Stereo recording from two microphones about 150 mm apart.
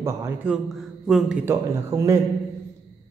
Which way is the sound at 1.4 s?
20° right (ahead or behind).